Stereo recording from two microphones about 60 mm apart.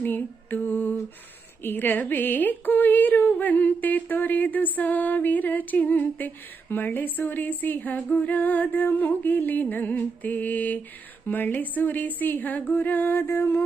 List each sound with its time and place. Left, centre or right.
0.0 s lullaby: left
1.6 s speech: left
13.2 s a sound: left